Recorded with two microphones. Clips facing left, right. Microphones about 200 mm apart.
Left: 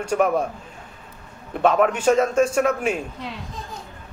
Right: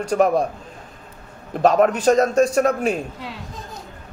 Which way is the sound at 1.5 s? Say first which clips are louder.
Right 2 dB; 40° right (ahead or behind).